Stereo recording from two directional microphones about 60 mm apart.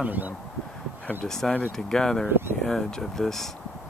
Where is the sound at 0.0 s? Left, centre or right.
Right.